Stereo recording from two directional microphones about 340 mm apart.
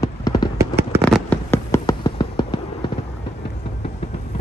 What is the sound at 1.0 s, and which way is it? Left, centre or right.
Fireworks, centre.